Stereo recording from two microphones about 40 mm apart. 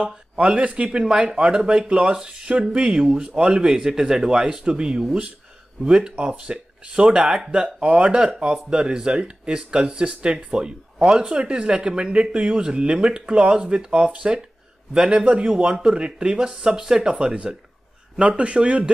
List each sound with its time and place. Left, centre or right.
0.0 s speech: right
6.1 s speech: right
11.0 s speech: centre
11.2 s speech: right
18.2 s speech: right